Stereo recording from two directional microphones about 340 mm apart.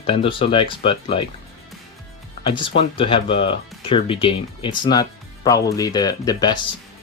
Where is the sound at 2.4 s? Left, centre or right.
Centre.